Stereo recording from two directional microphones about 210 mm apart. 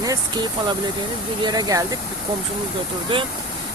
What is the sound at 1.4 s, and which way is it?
Speech, 20° right (ahead or behind).